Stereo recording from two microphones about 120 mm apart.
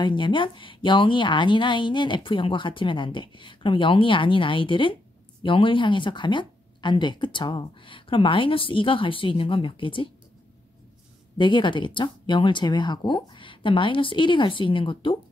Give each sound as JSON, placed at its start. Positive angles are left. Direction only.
{"t": 0.0, "sound": "a woman's voice", "side_deg": 40}
{"t": 11.3, "sound": "a woman's voice", "side_deg": 40}